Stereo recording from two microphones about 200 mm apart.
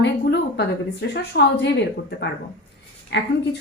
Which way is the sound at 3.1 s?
60° left (ahead or behind).